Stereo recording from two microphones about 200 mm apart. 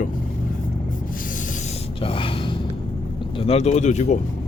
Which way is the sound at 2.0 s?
25° left (ahead or behind).